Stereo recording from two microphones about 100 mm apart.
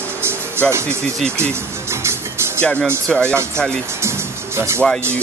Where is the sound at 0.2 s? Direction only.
25° right (ahead or behind).